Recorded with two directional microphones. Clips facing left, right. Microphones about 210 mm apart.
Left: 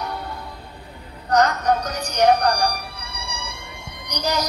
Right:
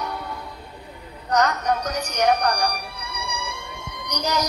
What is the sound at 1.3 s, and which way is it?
A woman's voice, 30° left (ahead or behind).